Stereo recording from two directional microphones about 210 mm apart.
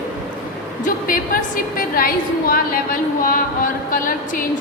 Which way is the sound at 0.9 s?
40° left (ahead or behind).